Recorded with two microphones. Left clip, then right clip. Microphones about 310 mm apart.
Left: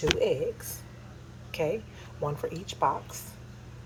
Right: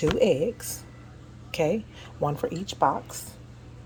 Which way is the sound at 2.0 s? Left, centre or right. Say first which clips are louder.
Right 5 dB; right.